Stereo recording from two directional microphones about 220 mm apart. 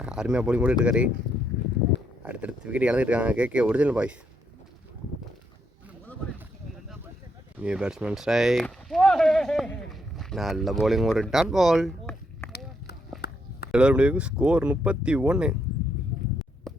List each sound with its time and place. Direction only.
0.0 s speech: 5° right (ahead or behind)
2.2 s speech: 5° right (ahead or behind)
7.6 s speech: 5° right (ahead or behind)
12.4 s a sound: 10° left (ahead or behind)
13.2 s a sound: 45° left (ahead or behind)
13.7 s speech: 5° right (ahead or behind)